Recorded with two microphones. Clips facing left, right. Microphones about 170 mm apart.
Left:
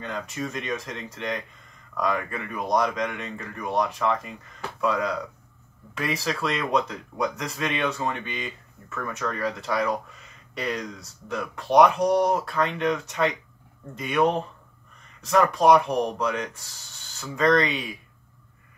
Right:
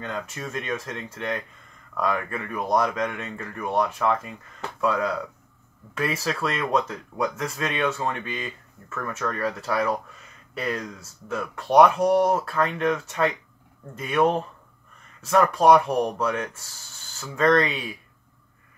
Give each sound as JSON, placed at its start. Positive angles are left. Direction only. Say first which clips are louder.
{"t": 0.0, "sound": "speech", "louder": "left 1 dB", "side_deg": 0}